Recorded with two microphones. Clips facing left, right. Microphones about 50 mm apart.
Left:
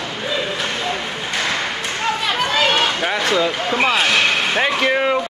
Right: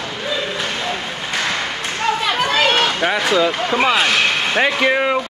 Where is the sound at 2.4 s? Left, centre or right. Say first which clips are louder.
Even; centre.